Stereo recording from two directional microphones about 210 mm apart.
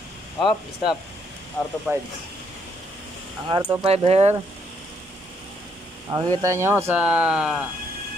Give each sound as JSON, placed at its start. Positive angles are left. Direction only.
{"t": 0.4, "sound": "speech", "side_deg": 0}
{"t": 3.5, "sound": "speech", "side_deg": -20}
{"t": 6.0, "sound": "speech", "side_deg": -15}